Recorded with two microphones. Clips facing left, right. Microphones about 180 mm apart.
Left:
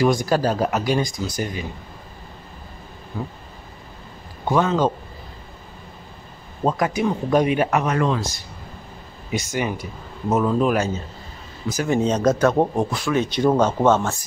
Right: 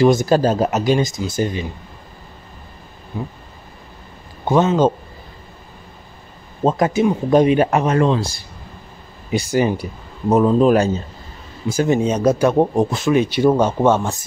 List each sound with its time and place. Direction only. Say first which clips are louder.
0.0 s speech: right 5 dB; 25° right (ahead or behind)
3.1 s speech: right 2 dB; 15° right (ahead or behind)
4.5 s speech: right 4 dB; 25° right (ahead or behind)
6.6 s speech: right 5 dB; 25° right (ahead or behind)
12.0 s speech: right 2 dB; 10° right (ahead or behind)
12.9 s speech: right 5 dB; 20° right (ahead or behind)
13.2 s speech: right 1 dB; 10° right (ahead or behind)